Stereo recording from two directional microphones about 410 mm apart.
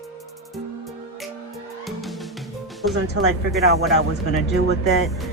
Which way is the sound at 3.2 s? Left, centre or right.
Right.